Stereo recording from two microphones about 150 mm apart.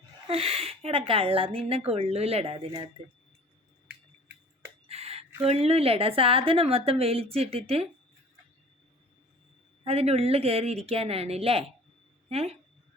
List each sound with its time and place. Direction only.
0.3 s speech: 40° right (ahead or behind)
4.9 s speech: 40° right (ahead or behind)
9.8 s speech: 40° right (ahead or behind)